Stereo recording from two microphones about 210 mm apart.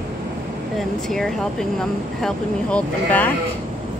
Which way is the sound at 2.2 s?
5° left (ahead or behind).